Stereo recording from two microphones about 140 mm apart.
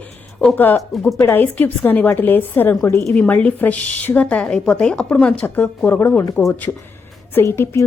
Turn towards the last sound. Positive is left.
turn(degrees=20)  # may be behind; listen again after turning